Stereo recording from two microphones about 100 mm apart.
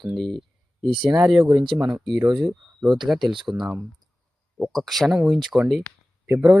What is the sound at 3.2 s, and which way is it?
Speech, 50° right (ahead or behind).